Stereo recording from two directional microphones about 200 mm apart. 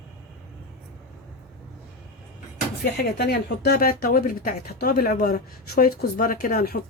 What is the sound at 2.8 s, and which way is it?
A woman's voice, 50° left (ahead or behind).